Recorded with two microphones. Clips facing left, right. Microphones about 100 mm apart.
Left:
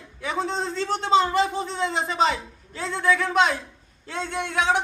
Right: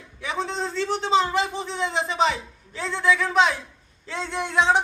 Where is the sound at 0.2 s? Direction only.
45° left (ahead or behind).